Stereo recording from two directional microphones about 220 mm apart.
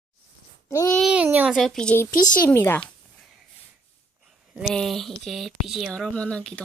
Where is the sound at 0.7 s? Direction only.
15° left (ahead or behind).